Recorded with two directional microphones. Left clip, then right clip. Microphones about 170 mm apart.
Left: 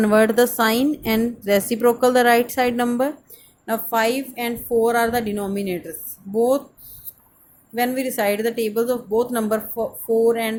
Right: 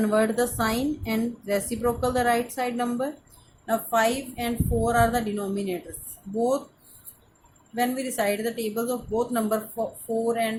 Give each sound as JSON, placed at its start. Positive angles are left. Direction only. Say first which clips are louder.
{"t": 0.0, "sound": "a woman's voice", "louder": "left 7 dB", "side_deg": 40}
{"t": 7.8, "sound": "a woman's voice", "louder": "left 5 dB", "side_deg": 40}